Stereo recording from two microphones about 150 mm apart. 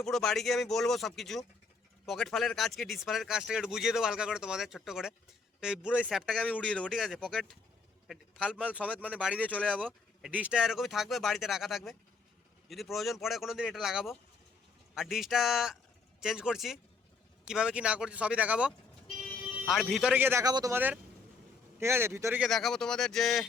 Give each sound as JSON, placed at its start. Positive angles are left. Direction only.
{"t": 0.0, "sound": "a man's voice", "side_deg": 0}
{"t": 9.6, "sound": "a man's voice", "side_deg": -10}
{"t": 20.7, "sound": "speech", "side_deg": -10}
{"t": 22.4, "sound": "speech", "side_deg": 0}